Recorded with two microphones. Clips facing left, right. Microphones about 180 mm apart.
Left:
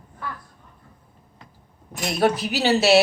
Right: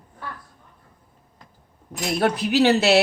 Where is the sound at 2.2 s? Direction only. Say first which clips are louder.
Right 2 dB; 60° right (ahead or behind).